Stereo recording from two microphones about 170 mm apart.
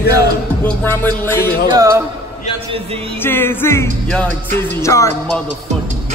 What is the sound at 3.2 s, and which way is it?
Music, 15° left (ahead or behind).